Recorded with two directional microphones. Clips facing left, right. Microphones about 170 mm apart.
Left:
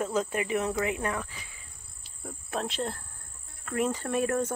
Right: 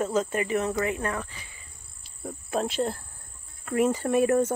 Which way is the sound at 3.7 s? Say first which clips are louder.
Right 5 dB; 10° right (ahead or behind).